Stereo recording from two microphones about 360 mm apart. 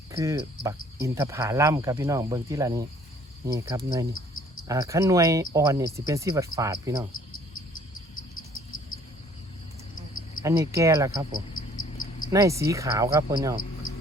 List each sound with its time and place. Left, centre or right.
0.1 s insect: centre
0.6 s speech: centre
9.9 s cricket: left
10.4 s speech: centre
11.5 s cricket: left
12.3 s speech: centre